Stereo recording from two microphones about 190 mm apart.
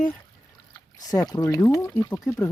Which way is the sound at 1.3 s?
15° left (ahead or behind).